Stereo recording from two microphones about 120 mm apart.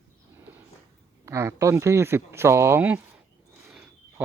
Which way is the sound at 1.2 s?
25° right (ahead or behind).